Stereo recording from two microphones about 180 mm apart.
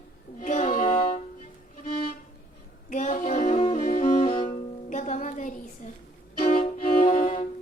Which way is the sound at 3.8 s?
50° left (ahead or behind).